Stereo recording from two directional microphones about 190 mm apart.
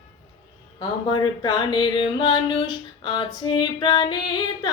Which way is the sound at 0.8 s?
20° left (ahead or behind).